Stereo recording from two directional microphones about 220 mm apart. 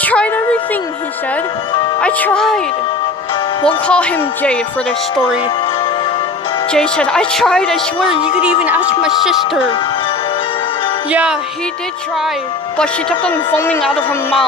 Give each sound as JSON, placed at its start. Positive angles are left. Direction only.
{"t": 0.0, "sound": "a sound", "side_deg": 5}
{"t": 2.0, "sound": "speech", "side_deg": 5}
{"t": 3.8, "sound": "speech", "side_deg": 5}
{"t": 6.7, "sound": "speech", "side_deg": 5}
{"t": 8.1, "sound": "speech", "side_deg": 25}
{"t": 8.6, "sound": "speech", "side_deg": 0}
{"t": 11.1, "sound": "speech", "side_deg": -5}
{"t": 12.7, "sound": "speech", "side_deg": 5}